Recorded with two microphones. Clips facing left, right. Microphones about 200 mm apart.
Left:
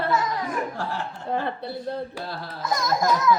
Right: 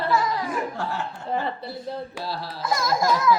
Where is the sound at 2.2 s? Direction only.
50° left (ahead or behind).